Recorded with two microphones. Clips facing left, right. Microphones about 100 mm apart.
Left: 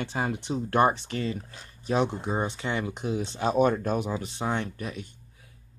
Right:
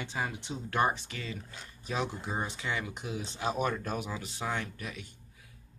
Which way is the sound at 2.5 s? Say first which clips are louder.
Left 5 dB; 35° left (ahead or behind).